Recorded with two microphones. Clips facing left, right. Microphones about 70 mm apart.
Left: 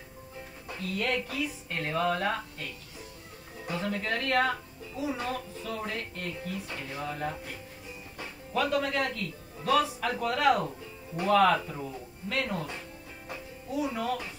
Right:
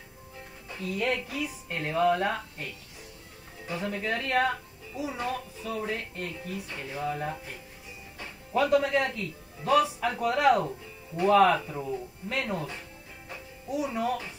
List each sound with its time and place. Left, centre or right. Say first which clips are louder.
0.7 s a child's voice: right 1 dB; centre
3.7 s a child's voice: right 1 dB; centre
6.8 s a child's voice: right 4 dB; centre
8.5 s a child's voice: right 4 dB; centre
13.7 s a child's voice: right 2 dB; centre